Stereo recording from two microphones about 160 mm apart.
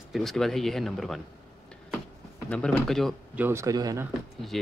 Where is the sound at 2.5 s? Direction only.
5° left (ahead or behind).